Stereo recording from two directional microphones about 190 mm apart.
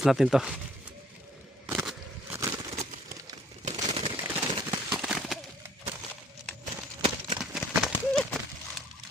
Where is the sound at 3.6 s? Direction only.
35° right (ahead or behind).